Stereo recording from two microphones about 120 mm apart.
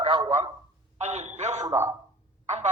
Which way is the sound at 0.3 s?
25° right (ahead or behind).